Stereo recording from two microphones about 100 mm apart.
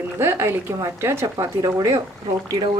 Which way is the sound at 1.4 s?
35° right (ahead or behind).